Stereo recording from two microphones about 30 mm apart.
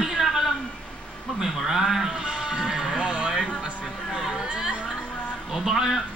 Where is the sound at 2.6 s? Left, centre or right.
Centre.